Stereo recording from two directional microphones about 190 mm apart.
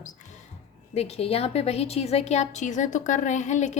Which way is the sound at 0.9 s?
30° left (ahead or behind).